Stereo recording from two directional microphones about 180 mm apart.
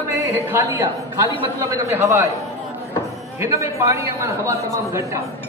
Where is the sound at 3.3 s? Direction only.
15° right (ahead or behind).